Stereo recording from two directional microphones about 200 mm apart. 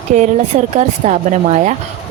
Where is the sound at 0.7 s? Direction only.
35° right (ahead or behind).